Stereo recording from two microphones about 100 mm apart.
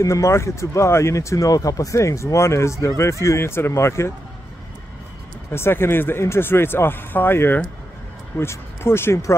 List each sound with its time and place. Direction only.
0.0 s speech: 30° left (ahead or behind)
5.5 s speech: 25° left (ahead or behind)